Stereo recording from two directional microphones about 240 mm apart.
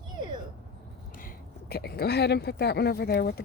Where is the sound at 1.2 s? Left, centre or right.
Left.